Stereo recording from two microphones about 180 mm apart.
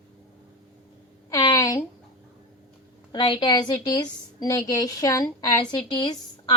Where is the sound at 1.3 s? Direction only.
20° left (ahead or behind).